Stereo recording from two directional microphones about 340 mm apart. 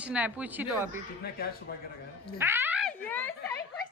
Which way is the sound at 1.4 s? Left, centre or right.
Left.